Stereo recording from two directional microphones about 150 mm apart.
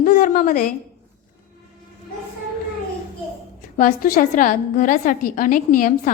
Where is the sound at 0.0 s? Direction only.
65° left (ahead or behind).